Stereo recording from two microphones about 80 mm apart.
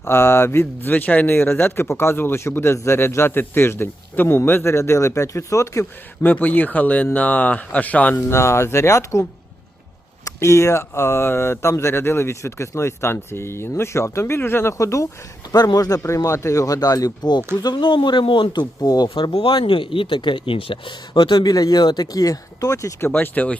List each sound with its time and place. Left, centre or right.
0.0 s speech: left
6.2 s speech: left
8.1 s speech: left
10.2 s speech: left
15.5 s speech: left
19.0 s speech: left
23.0 s speech: left